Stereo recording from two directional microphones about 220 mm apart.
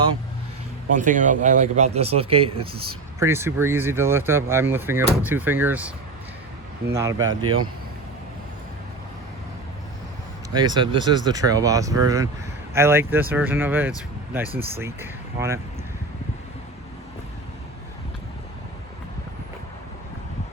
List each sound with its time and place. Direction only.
0.9 s speech: 35° right (ahead or behind)
3.2 s speech: 10° right (ahead or behind)
6.9 s speech: 15° right (ahead or behind)
10.5 s speech: 20° right (ahead or behind)